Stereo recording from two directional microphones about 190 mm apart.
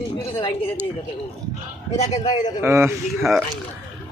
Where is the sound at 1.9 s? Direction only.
35° left (ahead or behind).